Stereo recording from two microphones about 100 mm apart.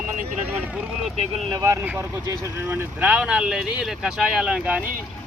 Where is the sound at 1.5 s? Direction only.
35° right (ahead or behind).